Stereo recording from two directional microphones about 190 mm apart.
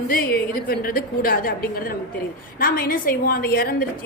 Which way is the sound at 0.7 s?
50° left (ahead or behind).